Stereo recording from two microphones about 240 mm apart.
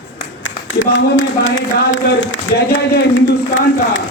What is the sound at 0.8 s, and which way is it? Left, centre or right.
A man's voice, left.